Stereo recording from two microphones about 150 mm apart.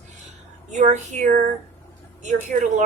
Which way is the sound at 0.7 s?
55° right (ahead or behind).